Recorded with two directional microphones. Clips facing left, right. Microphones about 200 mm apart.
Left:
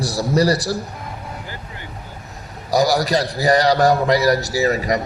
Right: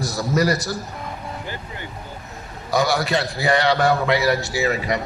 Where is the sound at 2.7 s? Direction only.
35° left (ahead or behind).